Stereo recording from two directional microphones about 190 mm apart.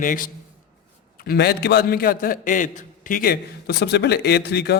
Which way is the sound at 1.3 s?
55° left (ahead or behind).